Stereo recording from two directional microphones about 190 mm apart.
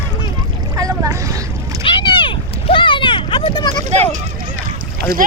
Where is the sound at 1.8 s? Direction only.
25° left (ahead or behind).